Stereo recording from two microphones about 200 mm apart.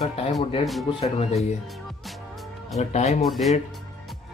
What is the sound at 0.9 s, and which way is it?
Speech, 30° left (ahead or behind).